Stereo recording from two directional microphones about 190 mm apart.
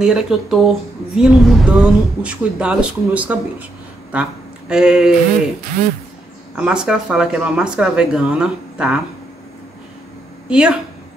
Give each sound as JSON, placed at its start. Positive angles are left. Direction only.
{"t": 0.0, "sound": "a woman's voice", "side_deg": 0}
{"t": 6.5, "sound": "a woman's voice", "side_deg": -5}
{"t": 10.5, "sound": "a woman's voice", "side_deg": -5}